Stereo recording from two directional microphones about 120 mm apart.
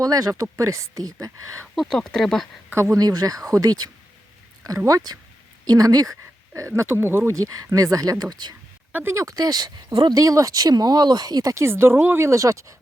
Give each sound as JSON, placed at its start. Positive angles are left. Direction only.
{"t": 0.0, "sound": "speech", "side_deg": -30}
{"t": 1.7, "sound": "speech", "side_deg": 0}
{"t": 2.6, "sound": "speech", "side_deg": -20}
{"t": 4.9, "sound": "speech", "side_deg": -30}
{"t": 8.9, "sound": "speech", "side_deg": -15}
{"t": 9.1, "sound": "speech", "side_deg": -30}